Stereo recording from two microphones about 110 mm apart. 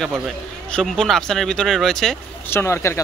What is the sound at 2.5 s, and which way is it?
Speech, 25° left (ahead or behind).